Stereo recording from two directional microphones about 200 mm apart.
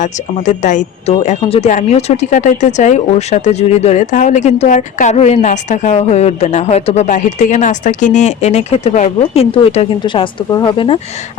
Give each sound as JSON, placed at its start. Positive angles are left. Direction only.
{"t": 0.0, "sound": "speech", "side_deg": 40}